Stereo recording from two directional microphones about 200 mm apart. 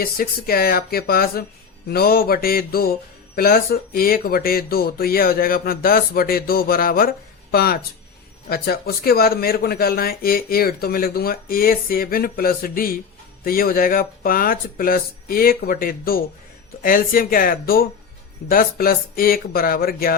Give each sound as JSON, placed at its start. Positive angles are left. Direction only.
{"t": 0.0, "sound": "mantra", "side_deg": 50}